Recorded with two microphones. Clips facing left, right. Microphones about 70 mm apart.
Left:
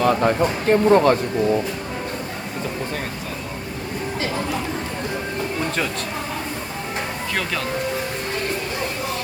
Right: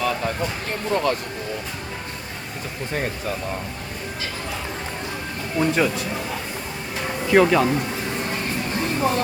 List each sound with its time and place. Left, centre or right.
0.0 s speech: left
5.5 s speech: centre
7.3 s speech: centre